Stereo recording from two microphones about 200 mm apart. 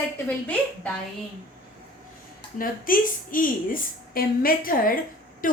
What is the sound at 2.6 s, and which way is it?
A woman's voice, 45° left (ahead or behind).